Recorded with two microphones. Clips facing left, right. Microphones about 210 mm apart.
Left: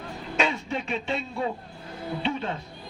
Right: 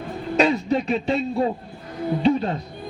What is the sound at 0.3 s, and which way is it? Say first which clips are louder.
A man's voice: right 8 dB; 40° right (ahead or behind).